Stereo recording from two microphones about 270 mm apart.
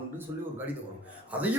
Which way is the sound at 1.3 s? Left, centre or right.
Centre.